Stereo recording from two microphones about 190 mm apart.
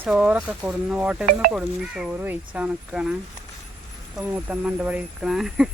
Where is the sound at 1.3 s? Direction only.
45° right (ahead or behind).